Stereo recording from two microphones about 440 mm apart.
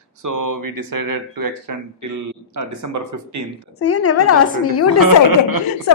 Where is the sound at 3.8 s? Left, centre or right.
Left.